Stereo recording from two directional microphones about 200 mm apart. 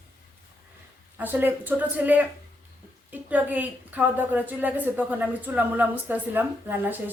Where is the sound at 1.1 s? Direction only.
10° right (ahead or behind).